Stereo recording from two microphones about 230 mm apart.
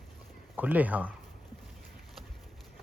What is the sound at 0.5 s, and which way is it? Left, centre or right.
Speech, centre.